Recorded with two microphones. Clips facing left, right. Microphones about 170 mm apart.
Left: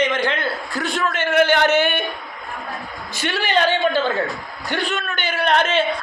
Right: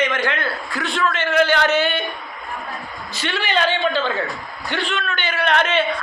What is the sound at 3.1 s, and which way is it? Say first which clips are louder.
Speech: left 1 dB; 45° left (ahead or behind).